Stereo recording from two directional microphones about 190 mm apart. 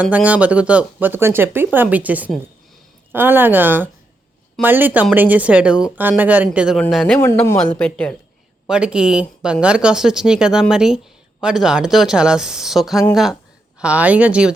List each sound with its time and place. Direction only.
0.0 s speech: 5° right (ahead or behind)
7.2 s a man's voice: 15° left (ahead or behind)
8.6 s speech: 5° right (ahead or behind)